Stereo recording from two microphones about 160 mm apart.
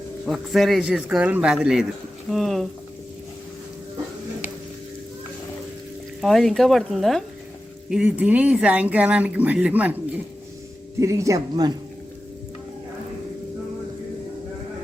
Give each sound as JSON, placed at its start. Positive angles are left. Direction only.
{"t": 0.3, "sound": "a man's voice", "side_deg": 0}
{"t": 6.2, "sound": "a man's voice", "side_deg": 0}
{"t": 11.0, "sound": "speech", "side_deg": -20}